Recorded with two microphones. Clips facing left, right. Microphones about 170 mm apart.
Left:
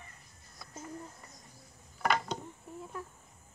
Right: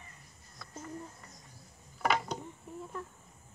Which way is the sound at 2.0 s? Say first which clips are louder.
Even; 5° right (ahead or behind).